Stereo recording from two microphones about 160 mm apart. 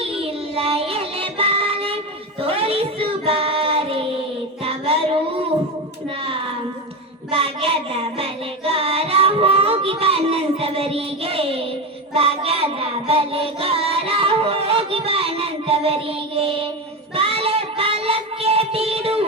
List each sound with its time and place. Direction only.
0.0 s music: 35° right (ahead or behind)
2.4 s child singing: 35° right (ahead or behind)
7.3 s child singing: 35° right (ahead or behind)